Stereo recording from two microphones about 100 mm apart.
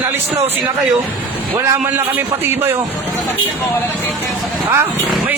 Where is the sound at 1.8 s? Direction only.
20° right (ahead or behind).